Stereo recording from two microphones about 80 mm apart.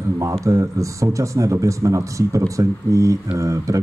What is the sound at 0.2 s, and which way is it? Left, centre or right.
Speech, right.